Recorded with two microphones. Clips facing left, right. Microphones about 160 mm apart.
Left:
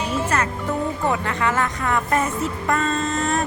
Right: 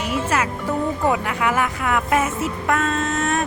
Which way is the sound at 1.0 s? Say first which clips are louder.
Right 1 dB; 10° right (ahead or behind).